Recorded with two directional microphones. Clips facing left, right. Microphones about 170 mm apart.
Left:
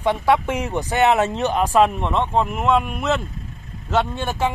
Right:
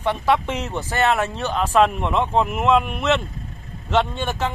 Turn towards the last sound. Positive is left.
turn(degrees=10)  # may be behind; listen again after turning